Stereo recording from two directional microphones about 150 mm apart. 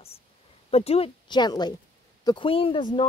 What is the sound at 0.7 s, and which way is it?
Speech, 40° left (ahead or behind).